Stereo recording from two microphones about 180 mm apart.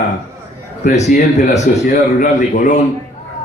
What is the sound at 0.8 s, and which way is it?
A man's voice, 40° left (ahead or behind).